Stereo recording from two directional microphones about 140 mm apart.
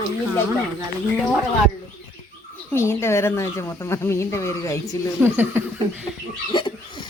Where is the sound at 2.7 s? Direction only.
20° left (ahead or behind).